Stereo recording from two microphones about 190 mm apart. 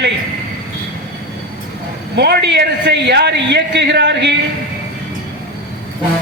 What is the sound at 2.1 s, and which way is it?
A man's voice, 60° right (ahead or behind).